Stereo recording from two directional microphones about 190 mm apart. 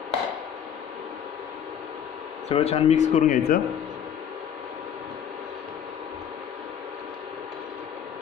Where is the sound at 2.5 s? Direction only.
35° left (ahead or behind).